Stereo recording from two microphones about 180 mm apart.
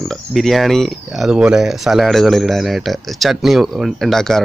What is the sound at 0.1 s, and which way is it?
Speech, centre (ahead or behind).